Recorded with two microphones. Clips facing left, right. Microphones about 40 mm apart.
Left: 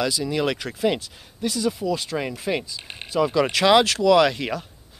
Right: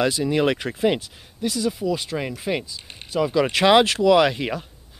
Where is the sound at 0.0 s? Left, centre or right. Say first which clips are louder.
Right 3 dB; right; by 2.7 s centre.